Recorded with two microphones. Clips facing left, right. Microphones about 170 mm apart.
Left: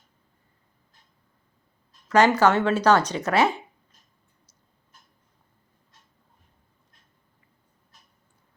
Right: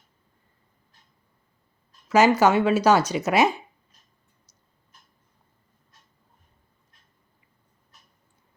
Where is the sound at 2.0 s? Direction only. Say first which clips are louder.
Right 1 dB; 5° right (ahead or behind).